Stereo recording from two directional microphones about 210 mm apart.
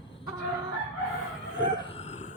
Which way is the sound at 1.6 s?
30° left (ahead or behind).